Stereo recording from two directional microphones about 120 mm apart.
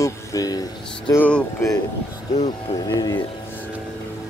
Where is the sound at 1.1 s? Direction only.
10° left (ahead or behind).